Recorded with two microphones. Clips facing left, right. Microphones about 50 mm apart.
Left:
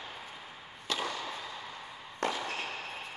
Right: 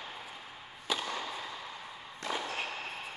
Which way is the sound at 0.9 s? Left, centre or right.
Centre.